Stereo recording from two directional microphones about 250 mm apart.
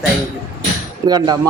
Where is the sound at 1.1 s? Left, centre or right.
Centre.